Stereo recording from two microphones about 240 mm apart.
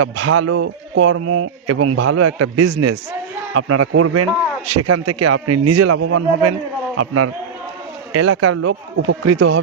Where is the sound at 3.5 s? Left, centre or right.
Right.